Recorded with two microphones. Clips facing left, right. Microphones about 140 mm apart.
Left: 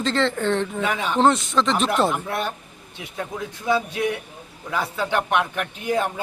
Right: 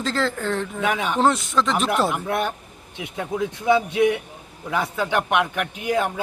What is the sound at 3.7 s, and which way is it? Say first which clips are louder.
A man's voice: right 4 dB; 20° right (ahead or behind).